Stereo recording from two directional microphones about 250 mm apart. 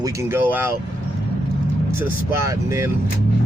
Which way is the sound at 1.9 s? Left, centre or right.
Centre.